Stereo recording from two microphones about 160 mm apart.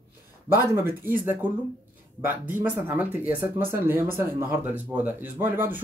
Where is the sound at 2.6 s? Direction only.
10° right (ahead or behind).